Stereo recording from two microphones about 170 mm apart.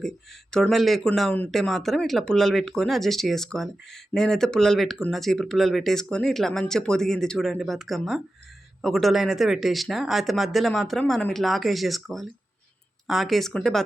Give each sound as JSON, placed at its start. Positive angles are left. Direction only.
{"t": 0.5, "sound": "speech", "side_deg": 5}